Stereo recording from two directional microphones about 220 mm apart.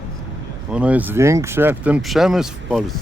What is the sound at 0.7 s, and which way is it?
Speech, 5° right (ahead or behind).